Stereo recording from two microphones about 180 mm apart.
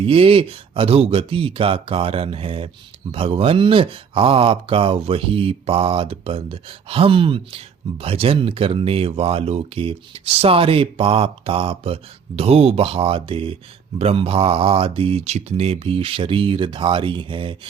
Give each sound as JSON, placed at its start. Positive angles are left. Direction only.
{"t": 0.0, "sound": "speech", "side_deg": -30}